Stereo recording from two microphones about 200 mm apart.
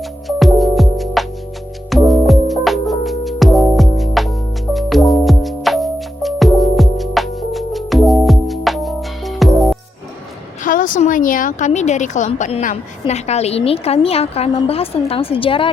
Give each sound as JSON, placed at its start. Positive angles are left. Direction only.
{"t": 0.0, "sound": "music", "side_deg": 0}
{"t": 10.6, "sound": "speech", "side_deg": 40}